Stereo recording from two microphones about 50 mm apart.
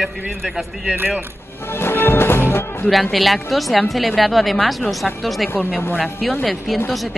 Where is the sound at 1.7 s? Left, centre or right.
Left.